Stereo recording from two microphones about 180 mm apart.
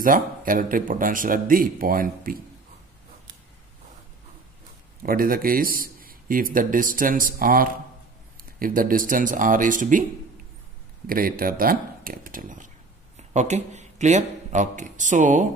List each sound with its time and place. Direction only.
0.0 s a man's voice: 50° right (ahead or behind)
5.0 s a man's voice: 55° right (ahead or behind)
11.1 s a man's voice: 55° right (ahead or behind)